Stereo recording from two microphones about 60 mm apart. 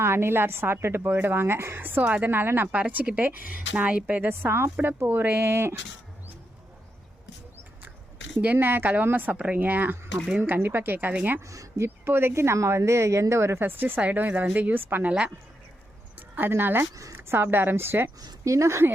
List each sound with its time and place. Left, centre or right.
0.0 s a woman's voice: right
1.8 s speech: right
2.7 s a woman's voice: right
4.3 s speech: right
8.5 s speech: right
11.4 s speech: right
12.0 s speech: right
16.1 s speech: right
18.2 s speech: right